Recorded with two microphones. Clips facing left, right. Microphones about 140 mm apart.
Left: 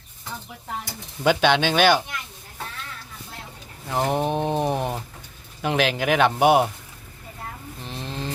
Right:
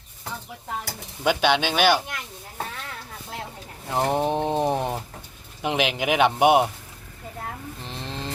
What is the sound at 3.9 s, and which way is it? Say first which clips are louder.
Speech: even; 20° right (ahead or behind).